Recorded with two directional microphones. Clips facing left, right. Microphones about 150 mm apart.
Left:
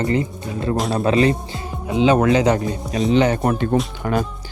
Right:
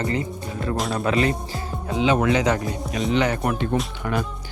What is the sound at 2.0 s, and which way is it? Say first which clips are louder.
Speech: left 5 dB; 40° left (ahead or behind).